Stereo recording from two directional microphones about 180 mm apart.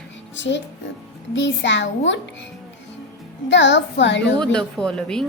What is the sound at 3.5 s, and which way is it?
Speech, 80° left.